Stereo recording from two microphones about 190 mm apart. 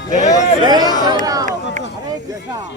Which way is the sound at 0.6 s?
20° right (ahead or behind).